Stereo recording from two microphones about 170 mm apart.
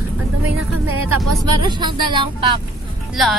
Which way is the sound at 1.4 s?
25° right (ahead or behind).